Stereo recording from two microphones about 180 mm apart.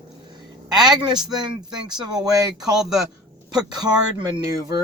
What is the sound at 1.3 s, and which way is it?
Speech, 25° right (ahead or behind).